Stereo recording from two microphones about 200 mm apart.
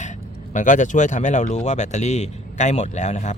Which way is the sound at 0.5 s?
40° left (ahead or behind).